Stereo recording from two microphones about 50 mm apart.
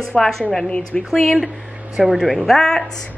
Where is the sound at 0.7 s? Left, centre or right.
Left.